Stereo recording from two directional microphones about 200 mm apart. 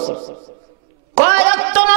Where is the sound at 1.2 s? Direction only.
10° right (ahead or behind).